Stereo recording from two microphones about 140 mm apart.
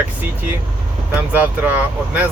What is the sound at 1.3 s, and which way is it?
Speech, 10° right (ahead or behind).